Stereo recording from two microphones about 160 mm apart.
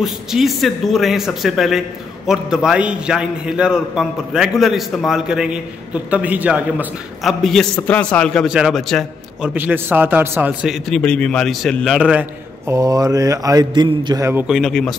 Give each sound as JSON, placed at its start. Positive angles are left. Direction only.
{"t": 0.0, "sound": "a man's voice", "side_deg": 0}
{"t": 9.5, "sound": "a man's voice", "side_deg": -10}
{"t": 12.6, "sound": "a man's voice", "side_deg": -20}
{"t": 14.5, "sound": "a man's voice", "side_deg": 5}